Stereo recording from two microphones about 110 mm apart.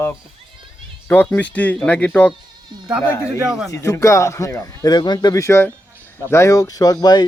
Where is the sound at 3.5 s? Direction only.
5° right (ahead or behind).